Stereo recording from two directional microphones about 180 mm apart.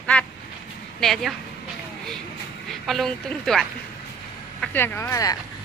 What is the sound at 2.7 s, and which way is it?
A woman's voice, centre (ahead or behind).